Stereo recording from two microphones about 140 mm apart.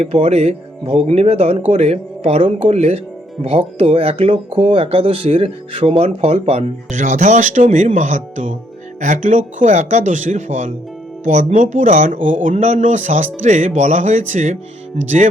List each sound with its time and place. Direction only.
0.0 s speech: 45° right (ahead or behind)